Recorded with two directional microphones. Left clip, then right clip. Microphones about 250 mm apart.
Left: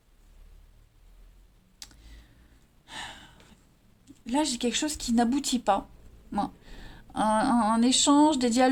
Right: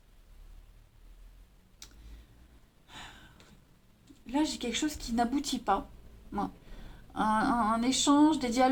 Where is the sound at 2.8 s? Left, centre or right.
Left.